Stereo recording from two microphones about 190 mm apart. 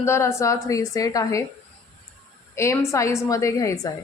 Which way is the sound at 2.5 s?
15° left (ahead or behind).